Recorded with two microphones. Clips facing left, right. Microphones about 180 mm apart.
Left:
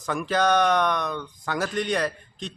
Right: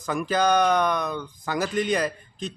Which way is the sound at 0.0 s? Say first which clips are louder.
Even; centre (ahead or behind).